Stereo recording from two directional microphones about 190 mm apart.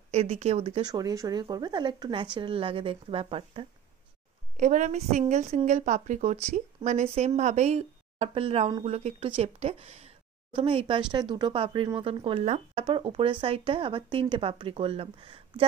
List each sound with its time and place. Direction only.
0.1 s a woman's voice: 35° right (ahead or behind)
0.9 s speech: 20° right (ahead or behind)
4.6 s a woman's voice: 40° right (ahead or behind)